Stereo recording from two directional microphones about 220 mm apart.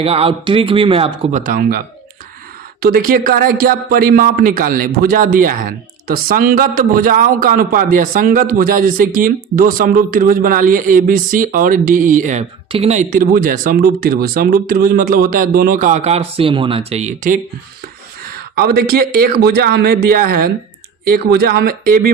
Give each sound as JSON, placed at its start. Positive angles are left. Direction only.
{"t": 0.0, "sound": "speech", "side_deg": -25}
{"t": 2.8, "sound": "a man's voice", "side_deg": -40}